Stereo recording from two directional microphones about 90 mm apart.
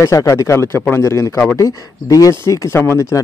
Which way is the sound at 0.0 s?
40° left (ahead or behind).